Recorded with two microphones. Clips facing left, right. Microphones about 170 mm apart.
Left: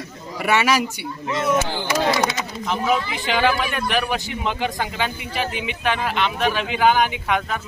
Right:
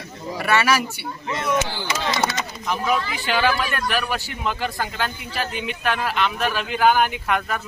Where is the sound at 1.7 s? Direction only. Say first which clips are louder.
Left 5 dB; 55° left (ahead or behind).